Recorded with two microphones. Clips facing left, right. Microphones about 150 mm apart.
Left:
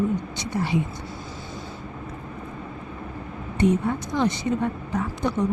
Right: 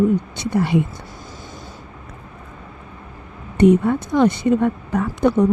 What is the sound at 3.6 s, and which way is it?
A woman's voice, 60° right (ahead or behind).